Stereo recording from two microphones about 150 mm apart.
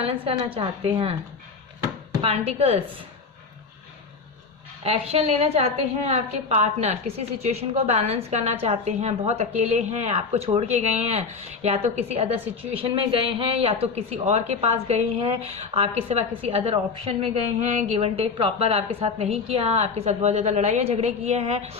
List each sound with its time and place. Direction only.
0.0 s a woman's voice: 40° right (ahead or behind)
2.2 s a woman's voice: 40° right (ahead or behind)
4.8 s speech: 40° right (ahead or behind)